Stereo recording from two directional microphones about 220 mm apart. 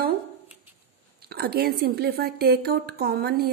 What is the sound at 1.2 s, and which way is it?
Speech, 45° right (ahead or behind).